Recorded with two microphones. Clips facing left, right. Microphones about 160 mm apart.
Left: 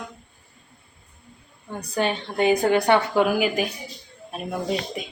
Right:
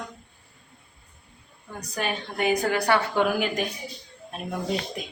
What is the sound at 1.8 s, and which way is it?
A woman's voice, 30° left (ahead or behind).